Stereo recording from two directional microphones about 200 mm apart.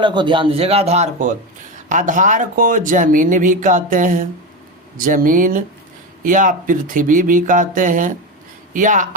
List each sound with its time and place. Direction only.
0.0 s a man's voice: 25° right (ahead or behind); by 9.0 s 40° right (ahead or behind)